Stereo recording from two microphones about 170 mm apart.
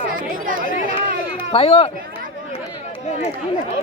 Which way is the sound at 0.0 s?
55° right (ahead or behind).